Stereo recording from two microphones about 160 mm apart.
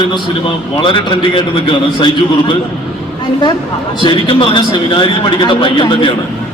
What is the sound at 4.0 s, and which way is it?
A man's voice, 30° left (ahead or behind).